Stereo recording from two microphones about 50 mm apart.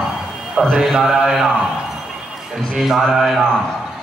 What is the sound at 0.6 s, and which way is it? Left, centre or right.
Speech, centre.